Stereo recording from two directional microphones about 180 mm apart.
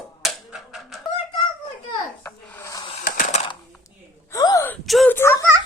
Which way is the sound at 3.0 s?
45° left (ahead or behind).